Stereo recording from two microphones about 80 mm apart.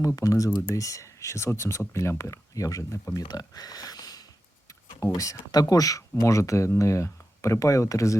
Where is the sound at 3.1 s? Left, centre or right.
Left.